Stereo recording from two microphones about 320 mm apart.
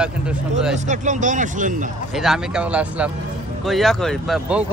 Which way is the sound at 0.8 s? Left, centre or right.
Right.